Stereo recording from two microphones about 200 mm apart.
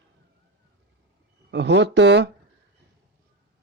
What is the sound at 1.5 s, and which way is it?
Speech, 60° right (ahead or behind).